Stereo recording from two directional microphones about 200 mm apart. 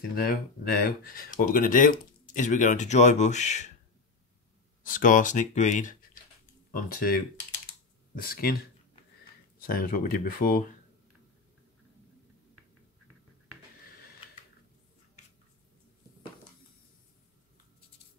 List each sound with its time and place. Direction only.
0.1 s speech: 50° left (ahead or behind)
4.8 s speech: 40° left (ahead or behind)
9.6 s speech: 45° left (ahead or behind)